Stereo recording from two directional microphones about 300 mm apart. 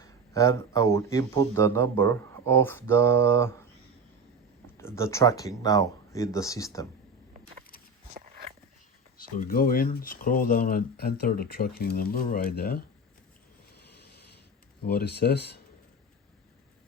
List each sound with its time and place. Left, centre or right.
0.0 s speech: centre
4.8 s speech: centre
8.1 s dog: right
9.1 s speech: left
14.8 s speech: left